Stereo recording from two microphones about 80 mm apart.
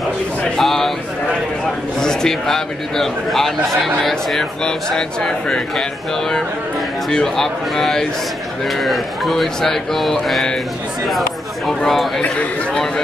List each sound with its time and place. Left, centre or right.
0.6 s a sound: centre
2.0 s a man's voice: centre
7.1 s a man's voice: centre